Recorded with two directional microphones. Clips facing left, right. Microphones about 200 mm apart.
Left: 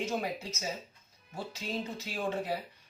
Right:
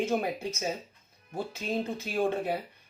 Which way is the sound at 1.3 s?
55° right (ahead or behind).